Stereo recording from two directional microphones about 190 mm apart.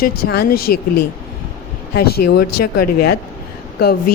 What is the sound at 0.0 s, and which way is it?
Speech, 55° left (ahead or behind).